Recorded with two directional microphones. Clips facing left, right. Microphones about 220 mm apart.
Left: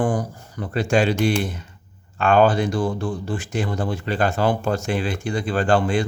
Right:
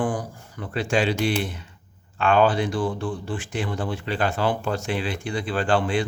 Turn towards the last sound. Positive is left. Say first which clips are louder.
# left 3 dB
turn(degrees=45)  # may be behind; listen again after turning